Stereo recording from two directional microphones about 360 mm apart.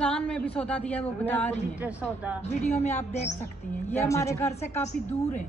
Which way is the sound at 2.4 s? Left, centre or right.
Centre.